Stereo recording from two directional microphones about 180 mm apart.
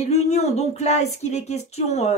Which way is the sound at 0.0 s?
35° left (ahead or behind).